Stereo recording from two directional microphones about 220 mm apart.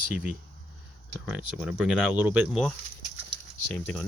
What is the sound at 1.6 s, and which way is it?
Speech, 5° right (ahead or behind).